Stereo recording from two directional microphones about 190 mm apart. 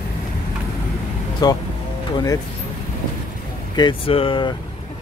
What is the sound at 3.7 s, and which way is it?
Speech, 25° left (ahead or behind).